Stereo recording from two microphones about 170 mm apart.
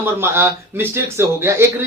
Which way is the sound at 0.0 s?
15° right (ahead or behind).